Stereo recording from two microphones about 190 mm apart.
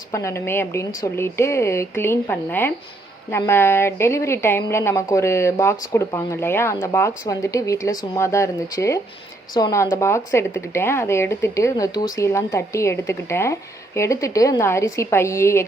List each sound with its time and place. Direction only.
0.1 s speech: 15° left (ahead or behind)